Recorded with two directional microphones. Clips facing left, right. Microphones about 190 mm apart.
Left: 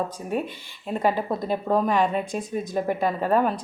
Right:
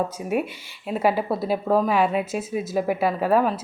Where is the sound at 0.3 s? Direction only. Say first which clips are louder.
Right 3 dB; 10° right (ahead or behind).